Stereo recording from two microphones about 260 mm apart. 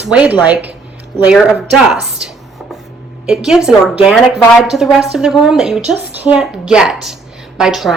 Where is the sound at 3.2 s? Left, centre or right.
Centre.